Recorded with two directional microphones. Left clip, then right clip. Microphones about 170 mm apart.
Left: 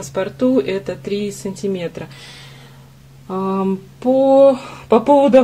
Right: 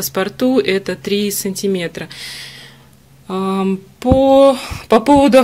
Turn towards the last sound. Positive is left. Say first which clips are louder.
# right 1 dB
turn(degrees=-25)  # may be behind; listen again after turning